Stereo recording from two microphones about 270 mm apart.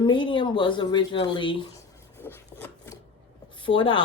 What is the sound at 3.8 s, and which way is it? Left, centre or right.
Speech, centre.